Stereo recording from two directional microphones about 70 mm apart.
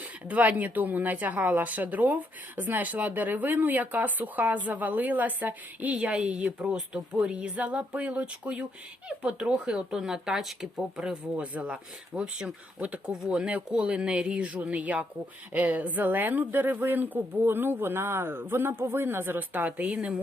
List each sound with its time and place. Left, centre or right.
0.0 s a woman's voice: right